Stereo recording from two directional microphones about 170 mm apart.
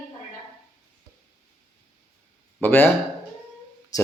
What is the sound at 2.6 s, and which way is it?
Speech, 10° left (ahead or behind).